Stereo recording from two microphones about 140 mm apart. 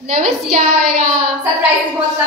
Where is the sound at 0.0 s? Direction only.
70° right (ahead or behind).